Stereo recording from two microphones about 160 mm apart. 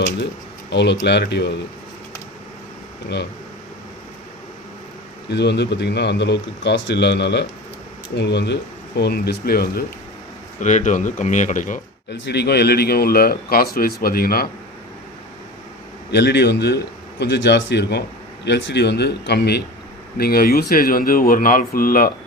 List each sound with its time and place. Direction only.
0.7 s a man's voice: 90° left
5.3 s a man's voice: 90° left; by 9.8 s 70° left (ahead or behind)
10.6 s speech: 50° left (ahead or behind)
12.2 s speech: 90° left; by 14.4 s 65° left (ahead or behind)
16.1 s a man's voice: 90° left
20.1 s speech: 70° left (ahead or behind)